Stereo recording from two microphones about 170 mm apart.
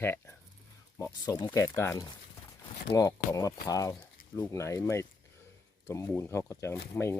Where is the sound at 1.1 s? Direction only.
25° left (ahead or behind).